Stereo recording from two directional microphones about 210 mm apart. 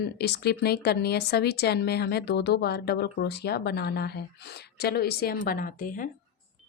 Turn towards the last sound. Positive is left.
turn(degrees=40)  # may be behind; listen again after turning